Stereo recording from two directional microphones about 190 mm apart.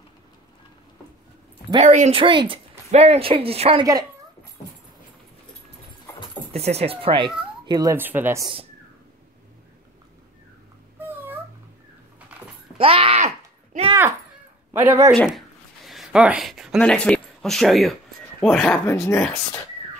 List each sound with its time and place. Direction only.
1.8 s speech: 35° right (ahead or behind)
6.5 s speech: 35° right (ahead or behind); by 8.5 s 10° right (ahead or behind)
11.0 s cat: 10° right (ahead or behind)
12.7 s groan: 30° right (ahead or behind)
14.7 s a man's voice: 10° right (ahead or behind)
15.1 s a sound: centre (ahead or behind)
18.4 s speech: centre (ahead or behind)
18.9 s speech: 15° left (ahead or behind)
19.1 s speech: centre (ahead or behind)